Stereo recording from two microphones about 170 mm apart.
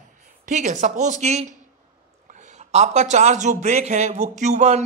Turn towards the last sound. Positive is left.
turn(degrees=-40)  # may be behind; listen again after turning